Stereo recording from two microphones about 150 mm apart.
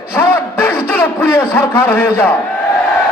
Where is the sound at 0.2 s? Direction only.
15° left (ahead or behind).